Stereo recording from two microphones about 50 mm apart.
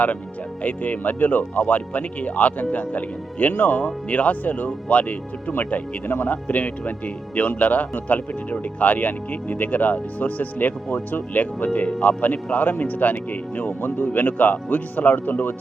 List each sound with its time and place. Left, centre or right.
0.6 s speech: left
11.9 s speech: left
12.2 s speech: left